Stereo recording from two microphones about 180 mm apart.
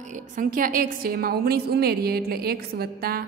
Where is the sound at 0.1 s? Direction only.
50° right (ahead or behind).